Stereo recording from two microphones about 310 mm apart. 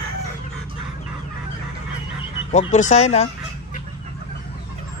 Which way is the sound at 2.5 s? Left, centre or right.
Left.